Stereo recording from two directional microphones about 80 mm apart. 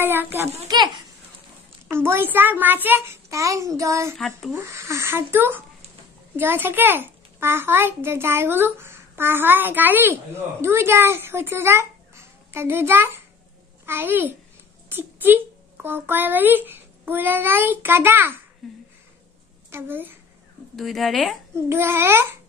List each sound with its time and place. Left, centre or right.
0.0 s a child's voice: right
0.7 s a child's voice: right
1.9 s a child's voice: right
3.3 s a child's voice: right
18.6 s speech: centre
19.7 s a child's voice: right
20.7 s speech: centre
21.6 s a child's voice: right